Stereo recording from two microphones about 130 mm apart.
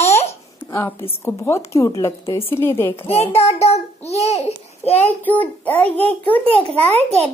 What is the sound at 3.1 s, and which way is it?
A child's voice, 50° left (ahead or behind).